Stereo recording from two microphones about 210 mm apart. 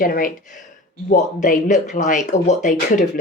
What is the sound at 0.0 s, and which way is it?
A woman's voice, 45° left (ahead or behind).